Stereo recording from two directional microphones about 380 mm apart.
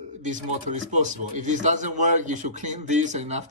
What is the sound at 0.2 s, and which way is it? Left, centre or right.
A man's voice, centre.